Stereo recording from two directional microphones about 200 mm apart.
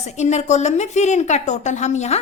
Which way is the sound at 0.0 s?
35° left (ahead or behind).